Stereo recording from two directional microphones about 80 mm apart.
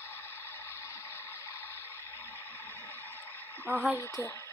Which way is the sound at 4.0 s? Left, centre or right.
Left.